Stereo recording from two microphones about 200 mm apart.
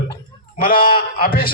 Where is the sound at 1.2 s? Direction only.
45° left (ahead or behind).